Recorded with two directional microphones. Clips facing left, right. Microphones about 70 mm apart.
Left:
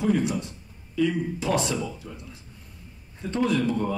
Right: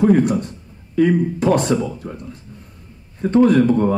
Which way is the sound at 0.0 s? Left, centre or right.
Right.